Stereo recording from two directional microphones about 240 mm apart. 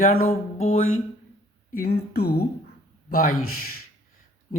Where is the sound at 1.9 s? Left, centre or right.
Left.